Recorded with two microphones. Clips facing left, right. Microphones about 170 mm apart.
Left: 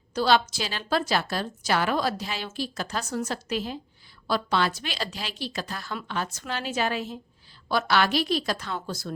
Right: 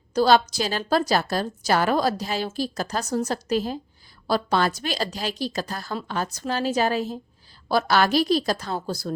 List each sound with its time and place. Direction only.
0.1 s a woman's voice: 40° right (ahead or behind)